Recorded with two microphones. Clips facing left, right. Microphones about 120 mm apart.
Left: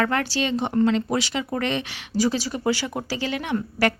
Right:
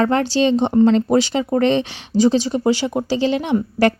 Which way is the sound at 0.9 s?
35° right (ahead or behind).